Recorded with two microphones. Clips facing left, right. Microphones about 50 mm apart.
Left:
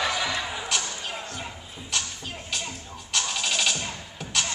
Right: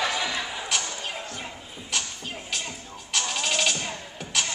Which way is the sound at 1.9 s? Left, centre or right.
Centre.